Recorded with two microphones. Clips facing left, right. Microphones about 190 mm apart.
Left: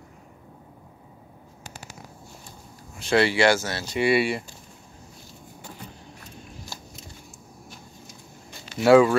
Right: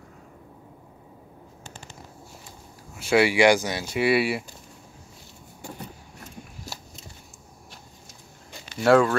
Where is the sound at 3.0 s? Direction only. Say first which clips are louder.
Right 1 dB; 10° right (ahead or behind).